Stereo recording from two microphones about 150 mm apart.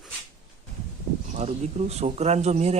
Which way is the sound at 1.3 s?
45° right (ahead or behind).